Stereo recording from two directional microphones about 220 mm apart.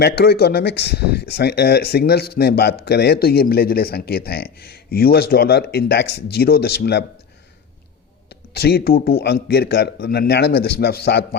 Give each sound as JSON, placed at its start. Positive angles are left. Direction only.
{"t": 0.0, "sound": "speech", "side_deg": 45}
{"t": 8.3, "sound": "speech", "side_deg": 45}